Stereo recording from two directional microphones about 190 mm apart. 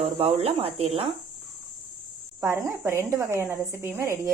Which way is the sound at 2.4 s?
15° right (ahead or behind).